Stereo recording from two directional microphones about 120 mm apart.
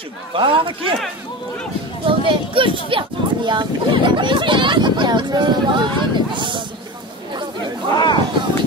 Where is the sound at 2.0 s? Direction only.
45° right (ahead or behind).